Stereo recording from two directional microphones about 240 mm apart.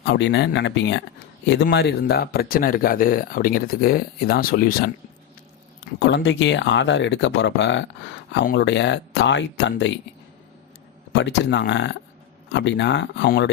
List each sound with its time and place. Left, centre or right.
0.0 s speech: left
6.0 s speech: left
11.1 s speech: left